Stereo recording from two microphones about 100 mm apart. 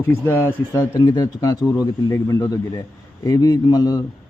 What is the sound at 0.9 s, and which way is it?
Speech, 45° left (ahead or behind).